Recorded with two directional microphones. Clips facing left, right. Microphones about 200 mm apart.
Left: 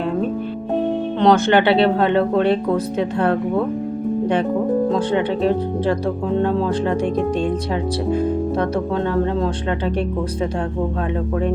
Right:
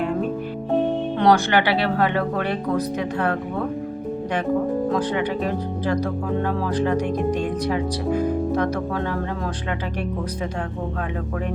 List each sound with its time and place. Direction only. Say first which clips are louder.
1.2 s speech: left 4 dB; 25° left (ahead or behind)
4.9 s speech: left 4 dB; 30° left (ahead or behind)